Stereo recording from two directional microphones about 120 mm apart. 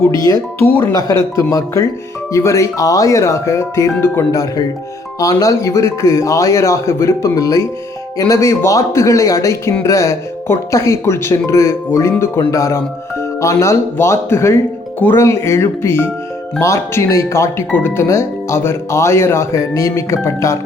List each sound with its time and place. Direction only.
0.6 s speech: 20° left (ahead or behind)